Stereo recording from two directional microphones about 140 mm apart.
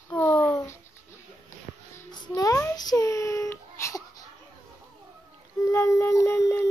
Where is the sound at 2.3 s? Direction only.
25° left (ahead or behind).